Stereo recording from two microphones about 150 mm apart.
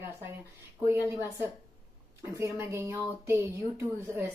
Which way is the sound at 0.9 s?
15° right (ahead or behind).